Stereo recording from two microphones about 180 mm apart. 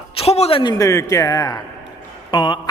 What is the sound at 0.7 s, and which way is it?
A man's voice, 20° left (ahead or behind).